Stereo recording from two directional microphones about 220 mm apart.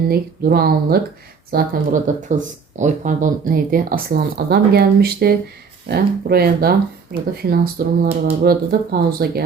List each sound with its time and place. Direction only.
0.1 s speech: 45° right (ahead or behind)